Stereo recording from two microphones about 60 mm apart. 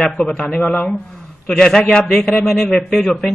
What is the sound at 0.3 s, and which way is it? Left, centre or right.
Speech, centre.